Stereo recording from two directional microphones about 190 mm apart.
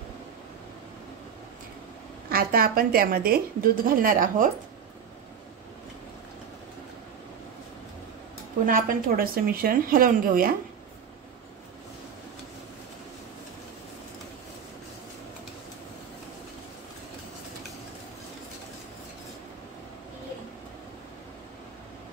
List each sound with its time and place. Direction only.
2.2 s a woman's voice: 50° right (ahead or behind)
8.6 s a woman's voice: 45° right (ahead or behind)